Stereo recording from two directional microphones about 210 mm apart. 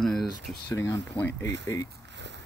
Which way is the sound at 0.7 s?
15° left (ahead or behind).